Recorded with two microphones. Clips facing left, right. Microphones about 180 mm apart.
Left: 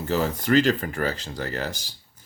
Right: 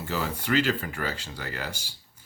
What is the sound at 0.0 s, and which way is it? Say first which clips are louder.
Speech: left 6 dB; 45° left (ahead or behind).